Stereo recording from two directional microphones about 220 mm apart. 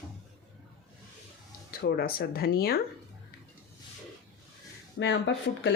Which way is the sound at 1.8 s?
45° left (ahead or behind).